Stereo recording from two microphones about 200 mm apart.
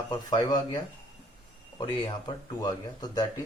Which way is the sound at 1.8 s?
25° left (ahead or behind).